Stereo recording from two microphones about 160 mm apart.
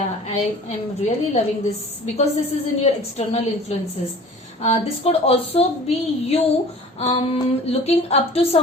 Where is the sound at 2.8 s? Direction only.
45° left (ahead or behind).